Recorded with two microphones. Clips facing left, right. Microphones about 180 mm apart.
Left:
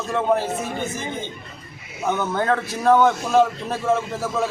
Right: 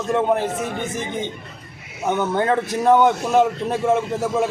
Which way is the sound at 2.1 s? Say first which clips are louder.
Right 2 dB; 20° right (ahead or behind).